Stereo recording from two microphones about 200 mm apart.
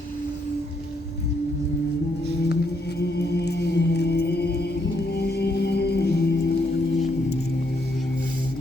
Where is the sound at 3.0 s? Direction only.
55° left (ahead or behind).